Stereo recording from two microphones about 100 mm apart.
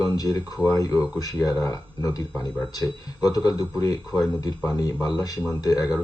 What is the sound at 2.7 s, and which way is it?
Speech, 40° left (ahead or behind).